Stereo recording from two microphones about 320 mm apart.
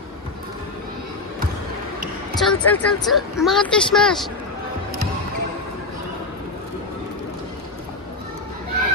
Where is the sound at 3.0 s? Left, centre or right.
Centre.